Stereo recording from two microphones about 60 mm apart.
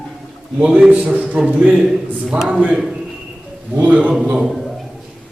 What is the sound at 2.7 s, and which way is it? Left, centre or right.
Speech, centre.